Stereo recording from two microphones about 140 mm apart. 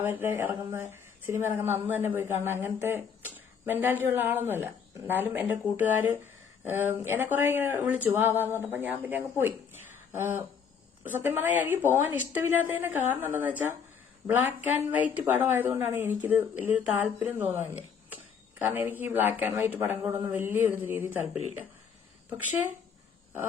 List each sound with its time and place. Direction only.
0.0 s speech: 15° right (ahead or behind)